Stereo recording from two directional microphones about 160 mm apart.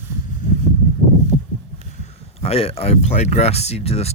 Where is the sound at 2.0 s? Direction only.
40° left (ahead or behind).